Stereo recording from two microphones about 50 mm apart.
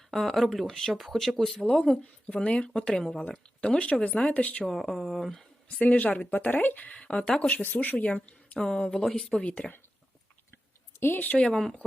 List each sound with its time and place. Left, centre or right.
0.1 s speech: centre
2.2 s speech: left
3.0 s speech: centre
3.2 s speech: centre
4.6 s speech: centre
5.8 s speech: left
8.5 s speech: centre
9.4 s speech: left
11.0 s speech: left
11.3 s speech: centre